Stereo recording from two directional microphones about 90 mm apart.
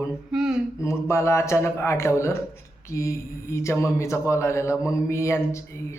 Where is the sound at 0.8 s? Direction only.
35° left (ahead or behind).